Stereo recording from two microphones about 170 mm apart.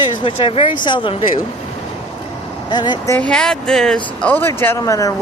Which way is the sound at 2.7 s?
25° left (ahead or behind).